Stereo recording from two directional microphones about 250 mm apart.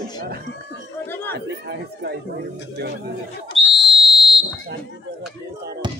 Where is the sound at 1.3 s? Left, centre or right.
Right.